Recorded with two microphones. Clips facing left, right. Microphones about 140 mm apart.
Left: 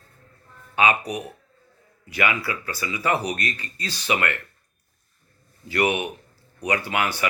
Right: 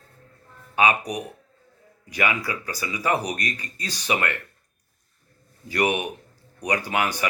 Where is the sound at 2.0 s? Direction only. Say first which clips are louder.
Left 1 dB; 15° right (ahead or behind).